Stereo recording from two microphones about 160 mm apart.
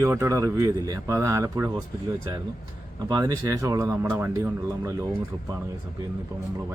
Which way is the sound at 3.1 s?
25° right (ahead or behind).